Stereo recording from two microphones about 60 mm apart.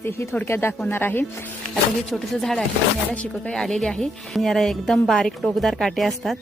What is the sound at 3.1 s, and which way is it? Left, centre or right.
Speech, centre.